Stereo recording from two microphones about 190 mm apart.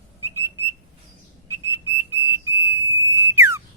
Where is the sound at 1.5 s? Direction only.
15° right (ahead or behind).